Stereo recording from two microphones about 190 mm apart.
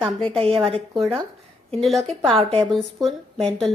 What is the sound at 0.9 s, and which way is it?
A woman's voice, centre (ahead or behind).